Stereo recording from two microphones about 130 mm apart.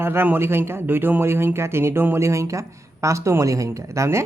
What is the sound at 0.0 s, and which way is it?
Speech, 15° right (ahead or behind).